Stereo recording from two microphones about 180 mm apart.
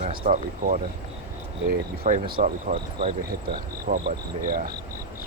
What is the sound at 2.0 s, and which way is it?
Speech, 55° right (ahead or behind).